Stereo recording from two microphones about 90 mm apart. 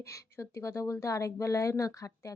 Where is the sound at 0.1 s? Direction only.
35° left (ahead or behind).